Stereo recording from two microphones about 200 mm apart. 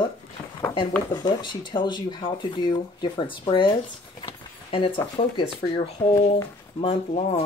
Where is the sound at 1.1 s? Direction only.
20° left (ahead or behind).